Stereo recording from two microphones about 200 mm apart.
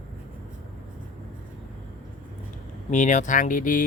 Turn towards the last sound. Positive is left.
turn(degrees=40)  # may be behind; listen again after turning